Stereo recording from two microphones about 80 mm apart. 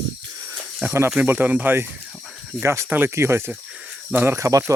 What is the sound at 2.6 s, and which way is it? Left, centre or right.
Speech, right.